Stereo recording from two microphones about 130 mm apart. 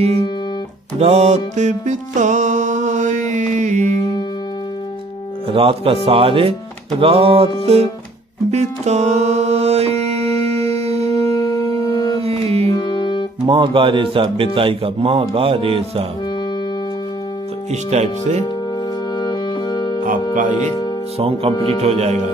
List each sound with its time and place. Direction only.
0.9 s music: 55° right (ahead or behind)
5.5 s speech: 45° right (ahead or behind)
8.5 s music: 60° right (ahead or behind)
11.2 s music: 25° left (ahead or behind)
12.2 s music: 50° right (ahead or behind)
12.7 s music: 35° left (ahead or behind)
13.5 s speech: 40° right (ahead or behind)
17.8 s speech: 60° right (ahead or behind)
19.1 s music: 35° left (ahead or behind)
21.2 s speech: 45° right (ahead or behind)
21.8 s speech: 55° right (ahead or behind)